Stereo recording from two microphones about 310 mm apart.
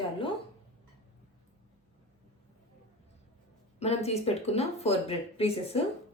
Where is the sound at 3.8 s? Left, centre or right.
Left.